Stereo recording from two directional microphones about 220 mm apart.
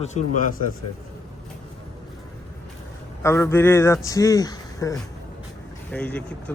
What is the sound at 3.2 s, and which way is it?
Speech, 10° left (ahead or behind).